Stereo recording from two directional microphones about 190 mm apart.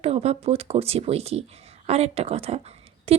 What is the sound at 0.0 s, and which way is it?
Speech, 35° right (ahead or behind).